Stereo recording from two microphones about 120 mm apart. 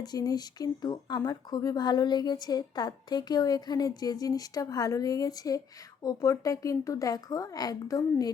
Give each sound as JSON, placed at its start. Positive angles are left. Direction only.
{"t": 0.0, "sound": "speech", "side_deg": 35}